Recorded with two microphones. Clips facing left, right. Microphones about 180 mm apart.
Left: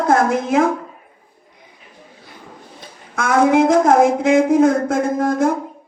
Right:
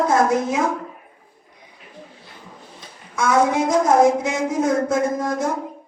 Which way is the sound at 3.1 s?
55° left (ahead or behind).